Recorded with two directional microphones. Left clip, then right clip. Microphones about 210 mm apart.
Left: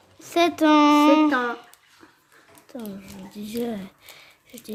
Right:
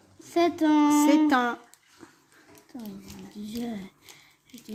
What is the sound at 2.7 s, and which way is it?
Speech, 25° left (ahead or behind).